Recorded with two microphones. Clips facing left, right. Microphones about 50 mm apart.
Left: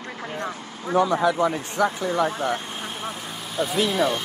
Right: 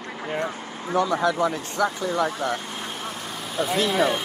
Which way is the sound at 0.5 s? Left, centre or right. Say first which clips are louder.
Right 2 dB; right.